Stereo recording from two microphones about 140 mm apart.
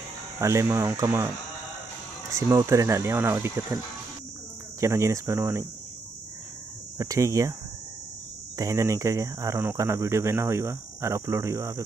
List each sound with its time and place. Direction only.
0.4 s speech: 20° right (ahead or behind)
2.3 s speech: 20° right (ahead or behind)
7.0 s speech: 25° right (ahead or behind)
8.5 s speech: 25° right (ahead or behind)